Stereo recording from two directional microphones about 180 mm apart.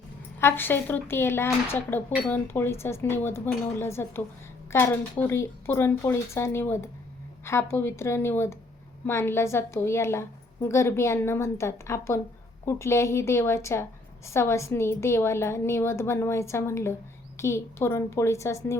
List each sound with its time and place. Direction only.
0.3 s speech: 15° left (ahead or behind)